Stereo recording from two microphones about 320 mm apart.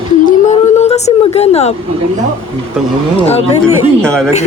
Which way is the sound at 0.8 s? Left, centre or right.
Left.